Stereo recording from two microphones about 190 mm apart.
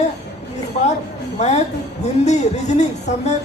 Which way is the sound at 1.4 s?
35° left (ahead or behind).